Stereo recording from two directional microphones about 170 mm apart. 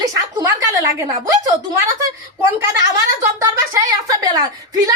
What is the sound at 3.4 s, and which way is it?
A woman's voice, 20° right (ahead or behind).